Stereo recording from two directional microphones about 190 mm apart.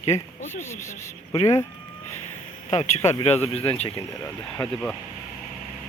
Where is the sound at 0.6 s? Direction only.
15° left (ahead or behind).